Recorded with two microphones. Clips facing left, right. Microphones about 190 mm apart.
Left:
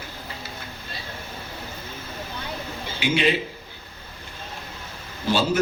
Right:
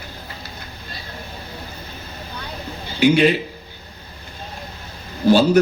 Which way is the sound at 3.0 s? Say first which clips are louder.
Right 8 dB; 45° right (ahead or behind).